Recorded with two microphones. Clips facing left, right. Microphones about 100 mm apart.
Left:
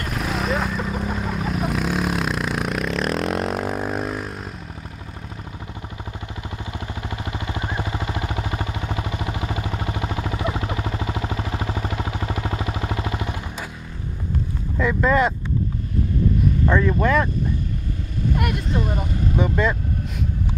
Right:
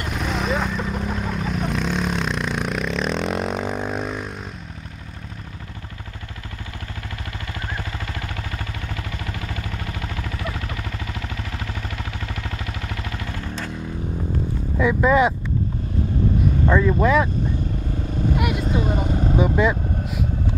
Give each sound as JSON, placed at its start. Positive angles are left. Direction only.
{"t": 0.0, "sound": "vehicle", "side_deg": 0}
{"t": 7.6, "sound": "a sound", "side_deg": 20}
{"t": 14.8, "sound": "vehicle", "side_deg": -5}
{"t": 16.6, "sound": "speech", "side_deg": -5}
{"t": 18.4, "sound": "vehicle", "side_deg": -5}
{"t": 18.9, "sound": "vehicle", "side_deg": -25}
{"t": 19.3, "sound": "vehicle", "side_deg": -5}